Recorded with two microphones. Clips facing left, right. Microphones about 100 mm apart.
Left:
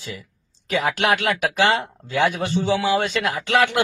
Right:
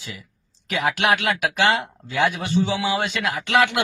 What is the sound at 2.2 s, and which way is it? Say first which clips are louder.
A man's voice: even; 50° left (ahead or behind).